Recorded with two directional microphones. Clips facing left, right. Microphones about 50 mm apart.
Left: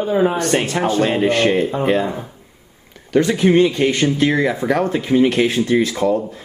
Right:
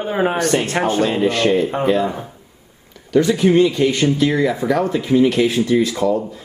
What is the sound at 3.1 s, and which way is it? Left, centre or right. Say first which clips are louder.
Speech: even; left.